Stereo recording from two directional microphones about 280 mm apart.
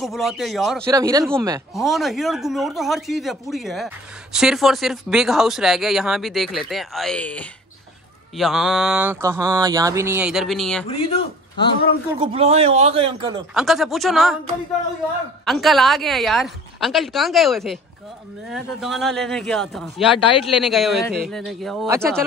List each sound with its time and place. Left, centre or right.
0.0 s speech: centre
0.9 s speech: centre
1.8 s speech: centre
10.9 s a sound: centre
12.2 s a man's voice: right
13.6 s speech: centre
15.4 s speech: centre